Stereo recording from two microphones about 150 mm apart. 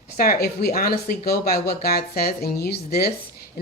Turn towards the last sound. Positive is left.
turn(degrees=90)